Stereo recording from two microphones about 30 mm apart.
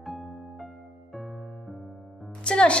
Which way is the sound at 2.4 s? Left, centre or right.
Left.